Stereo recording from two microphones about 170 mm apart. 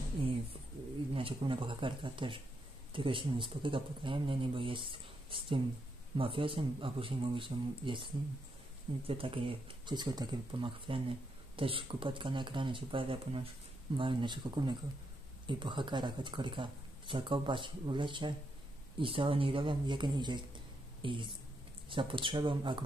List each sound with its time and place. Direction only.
1.1 s a woman's voice: 30° right (ahead or behind)